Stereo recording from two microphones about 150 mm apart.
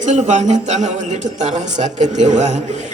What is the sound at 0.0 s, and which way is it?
A man's voice, 55° right (ahead or behind).